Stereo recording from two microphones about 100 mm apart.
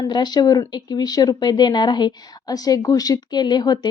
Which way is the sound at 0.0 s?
45° left (ahead or behind).